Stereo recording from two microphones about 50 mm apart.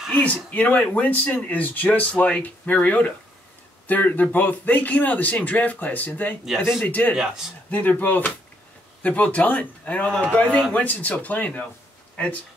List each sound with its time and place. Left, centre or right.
0.2 s speech: left
0.7 s speech: left
7.2 s a man's voice: centre
7.7 s speech: left